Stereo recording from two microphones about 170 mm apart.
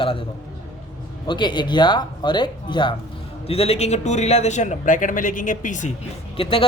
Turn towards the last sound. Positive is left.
turn(degrees=30)  # may be behind; listen again after turning